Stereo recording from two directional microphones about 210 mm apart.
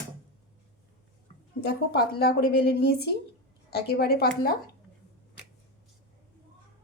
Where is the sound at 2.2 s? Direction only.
50° left (ahead or behind).